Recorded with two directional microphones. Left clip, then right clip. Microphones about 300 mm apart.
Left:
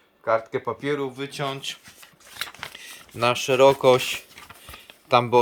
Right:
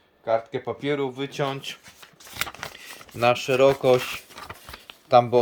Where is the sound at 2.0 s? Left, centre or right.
Right.